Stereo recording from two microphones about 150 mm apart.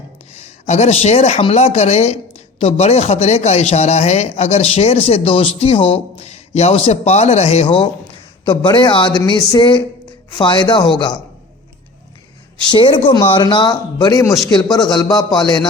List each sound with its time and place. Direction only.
0.3 s speech: 50° left (ahead or behind); by 11.2 s 30° left (ahead or behind)
12.7 s speech: 35° left (ahead or behind)